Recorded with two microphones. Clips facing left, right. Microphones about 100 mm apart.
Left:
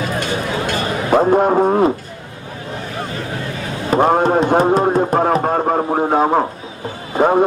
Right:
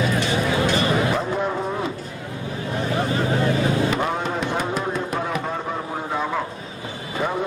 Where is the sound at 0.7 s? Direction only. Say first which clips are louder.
Left 4 dB; 50° left (ahead or behind).